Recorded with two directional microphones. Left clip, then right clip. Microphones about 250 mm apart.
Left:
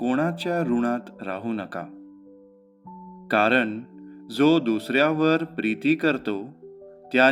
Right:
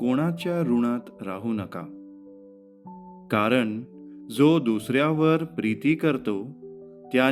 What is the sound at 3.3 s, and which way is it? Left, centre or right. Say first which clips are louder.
Speech: left 3 dB; right.